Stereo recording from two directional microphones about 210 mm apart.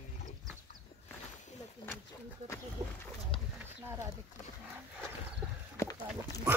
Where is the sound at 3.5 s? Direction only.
15° right (ahead or behind).